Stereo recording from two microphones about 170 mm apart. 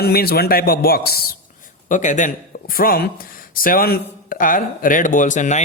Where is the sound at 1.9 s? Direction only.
45° left (ahead or behind).